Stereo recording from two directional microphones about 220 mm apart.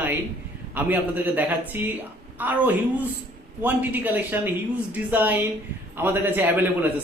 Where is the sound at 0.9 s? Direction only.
10° right (ahead or behind).